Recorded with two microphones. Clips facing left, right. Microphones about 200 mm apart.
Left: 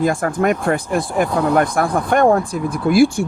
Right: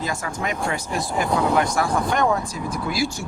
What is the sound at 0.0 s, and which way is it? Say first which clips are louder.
Speech: left 10 dB; 55° left (ahead or behind).